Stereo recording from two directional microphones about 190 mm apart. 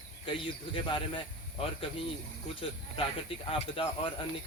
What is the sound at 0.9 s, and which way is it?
Speech, 25° left (ahead or behind).